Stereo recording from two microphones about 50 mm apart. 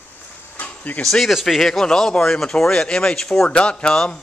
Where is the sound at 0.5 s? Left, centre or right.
Left.